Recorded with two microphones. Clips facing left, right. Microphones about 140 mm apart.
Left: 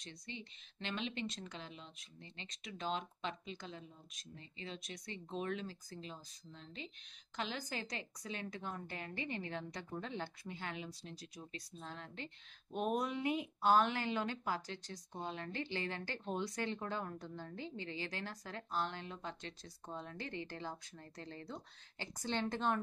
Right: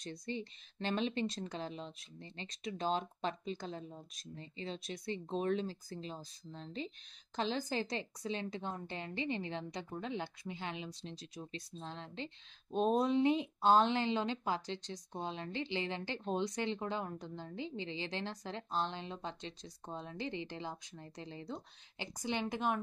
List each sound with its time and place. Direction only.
0.0 s a woman's voice: 35° right (ahead or behind); by 22.8 s 10° right (ahead or behind)